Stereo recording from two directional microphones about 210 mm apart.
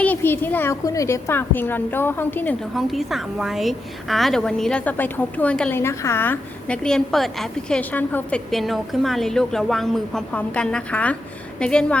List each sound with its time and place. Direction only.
0.0 s a woman's voice: 10° left (ahead or behind)